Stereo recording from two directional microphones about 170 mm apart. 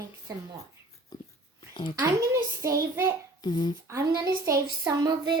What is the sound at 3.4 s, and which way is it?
Speech, 25° left (ahead or behind).